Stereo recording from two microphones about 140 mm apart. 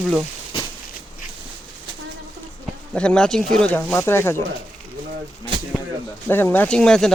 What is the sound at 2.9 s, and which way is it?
Speech, 5° left (ahead or behind).